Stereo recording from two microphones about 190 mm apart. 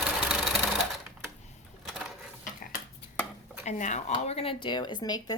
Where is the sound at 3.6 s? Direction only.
40° left (ahead or behind); by 5.3 s 20° left (ahead or behind).